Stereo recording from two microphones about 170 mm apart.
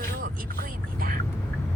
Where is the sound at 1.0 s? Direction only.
60° right (ahead or behind).